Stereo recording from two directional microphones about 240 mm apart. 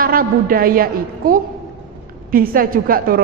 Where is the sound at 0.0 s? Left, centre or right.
Right.